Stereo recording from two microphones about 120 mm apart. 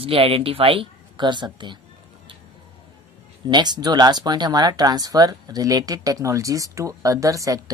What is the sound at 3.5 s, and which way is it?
Speech, 35° right (ahead or behind).